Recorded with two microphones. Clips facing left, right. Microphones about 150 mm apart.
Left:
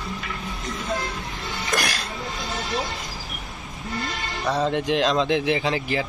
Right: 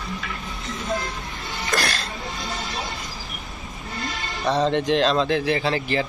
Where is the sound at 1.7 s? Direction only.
15° left (ahead or behind).